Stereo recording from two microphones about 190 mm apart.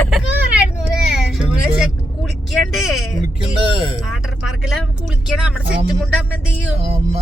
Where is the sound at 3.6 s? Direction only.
30° right (ahead or behind).